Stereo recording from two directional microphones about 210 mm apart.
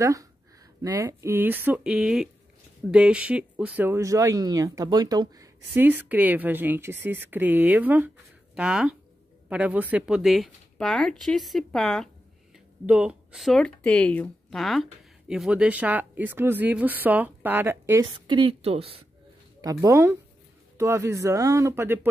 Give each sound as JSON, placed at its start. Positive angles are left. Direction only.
{"t": 0.0, "sound": "speech", "side_deg": -15}
{"t": 18.1, "sound": "a woman's voice", "side_deg": -20}
{"t": 19.6, "sound": "speech", "side_deg": -15}